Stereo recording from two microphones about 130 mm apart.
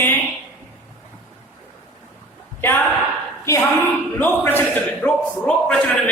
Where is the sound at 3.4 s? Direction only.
20° left (ahead or behind).